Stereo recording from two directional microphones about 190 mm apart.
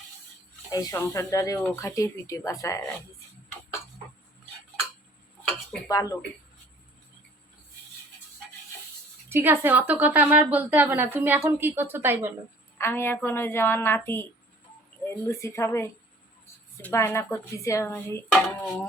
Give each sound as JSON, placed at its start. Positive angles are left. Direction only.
{"t": 0.7, "sound": "speech", "side_deg": 20}
{"t": 5.9, "sound": "speech", "side_deg": 20}
{"t": 9.3, "sound": "a woman's voice", "side_deg": -10}
{"t": 12.8, "sound": "speech", "side_deg": 10}
{"t": 15.3, "sound": "speech", "side_deg": 15}